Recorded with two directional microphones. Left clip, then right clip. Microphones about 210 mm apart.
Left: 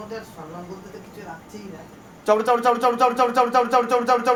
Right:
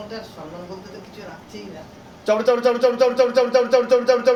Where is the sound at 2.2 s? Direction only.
55° left (ahead or behind).